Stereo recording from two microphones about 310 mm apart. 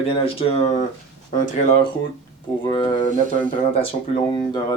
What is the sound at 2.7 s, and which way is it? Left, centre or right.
Speech, centre.